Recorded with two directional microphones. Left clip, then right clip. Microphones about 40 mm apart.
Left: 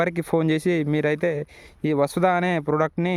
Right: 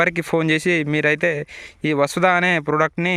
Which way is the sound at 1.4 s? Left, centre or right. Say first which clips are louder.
Right 3 dB; left.